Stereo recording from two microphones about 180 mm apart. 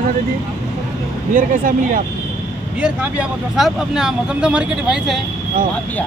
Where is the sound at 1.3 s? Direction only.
50° right (ahead or behind).